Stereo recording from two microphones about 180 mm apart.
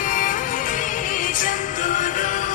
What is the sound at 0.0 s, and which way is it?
Music, 45° left (ahead or behind).